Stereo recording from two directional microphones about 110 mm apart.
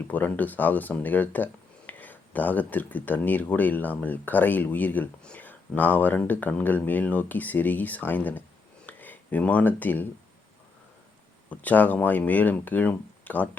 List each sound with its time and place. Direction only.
0.1 s speech: 15° left (ahead or behind)
11.4 s speech: 15° left (ahead or behind)